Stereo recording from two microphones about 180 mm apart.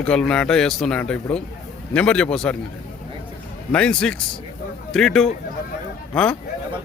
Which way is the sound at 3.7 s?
5° left (ahead or behind).